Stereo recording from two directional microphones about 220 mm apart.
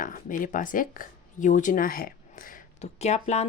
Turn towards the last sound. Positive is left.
turn(degrees=30)  # may be behind; listen again after turning